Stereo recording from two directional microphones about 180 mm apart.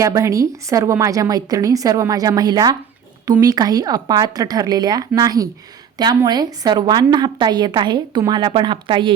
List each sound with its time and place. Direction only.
0.0 s a woman's voice: 15° right (ahead or behind)